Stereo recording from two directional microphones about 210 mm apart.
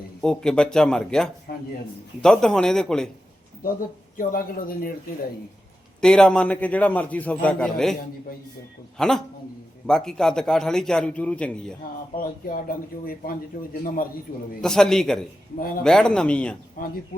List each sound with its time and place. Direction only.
0.2 s a man's voice: 5° left (ahead or behind)
1.5 s a sound: 45° left (ahead or behind)
2.2 s a man's voice: 5° left (ahead or behind)
4.2 s speech: 40° left (ahead or behind)
6.0 s a man's voice: 5° left (ahead or behind)
9.0 s a man's voice: 5° left (ahead or behind)
12.1 s a man's voice: 40° left (ahead or behind)
14.6 s a man's voice: centre (ahead or behind)
15.5 s speech: 45° left (ahead or behind)
15.8 s a man's voice: 5° left (ahead or behind)
16.8 s speech: 45° left (ahead or behind)